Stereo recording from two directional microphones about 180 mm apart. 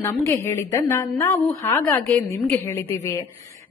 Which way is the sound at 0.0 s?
15° left (ahead or behind).